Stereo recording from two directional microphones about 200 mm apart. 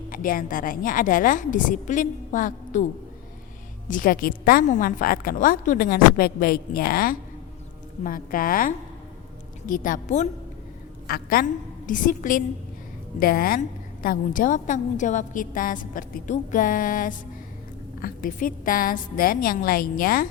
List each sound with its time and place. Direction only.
0.1 s a woman's voice: 45° left (ahead or behind)
3.8 s a woman's voice: 45° left (ahead or behind)